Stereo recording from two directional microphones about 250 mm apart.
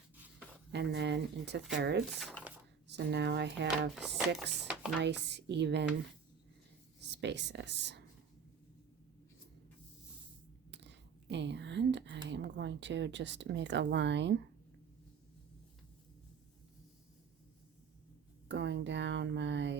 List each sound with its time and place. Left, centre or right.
0.7 s speech: right
2.1 s speech: centre
2.8 s speech: right
7.0 s speech: right
10.7 s a sound: right
12.3 s speech: right
18.4 s speech: right